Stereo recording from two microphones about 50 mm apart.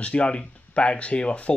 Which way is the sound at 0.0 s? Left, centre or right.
Left.